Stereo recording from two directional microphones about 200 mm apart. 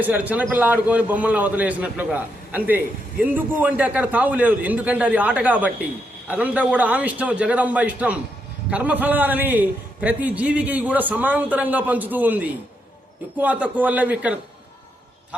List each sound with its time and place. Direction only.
0.0 s a man's voice: 10° right (ahead or behind)